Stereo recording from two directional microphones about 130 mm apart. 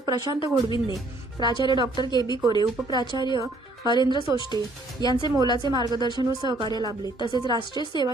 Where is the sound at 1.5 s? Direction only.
35° left (ahead or behind).